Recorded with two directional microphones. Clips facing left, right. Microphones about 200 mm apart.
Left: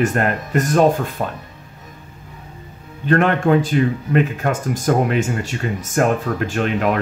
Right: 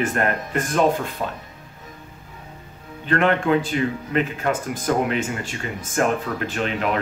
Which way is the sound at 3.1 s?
45° left (ahead or behind).